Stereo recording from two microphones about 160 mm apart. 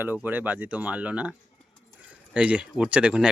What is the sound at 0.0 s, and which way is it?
Speech, 10° right (ahead or behind).